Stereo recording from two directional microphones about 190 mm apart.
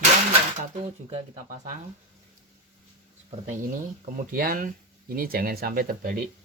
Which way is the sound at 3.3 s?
40° right (ahead or behind).